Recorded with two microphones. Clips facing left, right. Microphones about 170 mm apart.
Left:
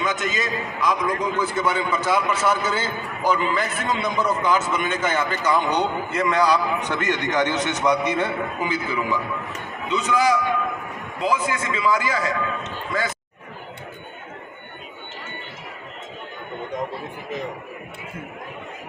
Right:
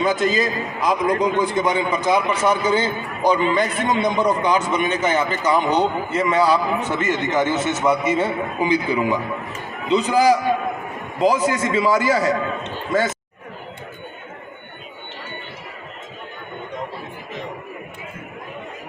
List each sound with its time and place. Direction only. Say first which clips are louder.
0.0 s a man's voice: right 6 dB; 35° right (ahead or behind)
4.8 s a man's voice: right 4 dB; 10° right (ahead or behind)
9.9 s a man's voice: right 5 dB; 35° right (ahead or behind)